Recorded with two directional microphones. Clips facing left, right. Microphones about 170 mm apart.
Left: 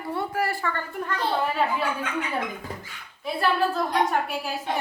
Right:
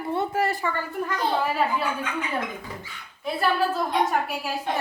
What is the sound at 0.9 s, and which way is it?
Speech, 5° right (ahead or behind).